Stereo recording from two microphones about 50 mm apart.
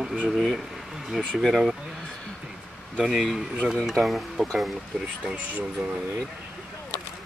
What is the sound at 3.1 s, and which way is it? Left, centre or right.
Speech, centre.